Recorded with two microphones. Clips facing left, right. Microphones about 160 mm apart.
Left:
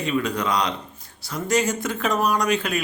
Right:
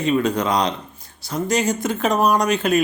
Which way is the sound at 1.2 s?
20° right (ahead or behind).